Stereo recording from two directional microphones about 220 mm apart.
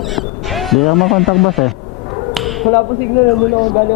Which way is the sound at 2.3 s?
Centre (ahead or behind).